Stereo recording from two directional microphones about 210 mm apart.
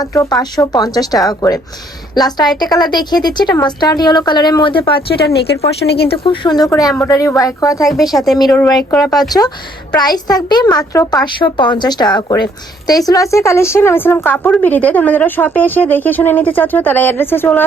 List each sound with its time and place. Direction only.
0.0 s a woman's voice: 15° left (ahead or behind)
4.9 s speech: 50° left (ahead or behind)
6.1 s a woman's voice: 25° left (ahead or behind)
7.9 s a woman's voice: centre (ahead or behind)
10.0 s a child's voice: 20° left (ahead or behind)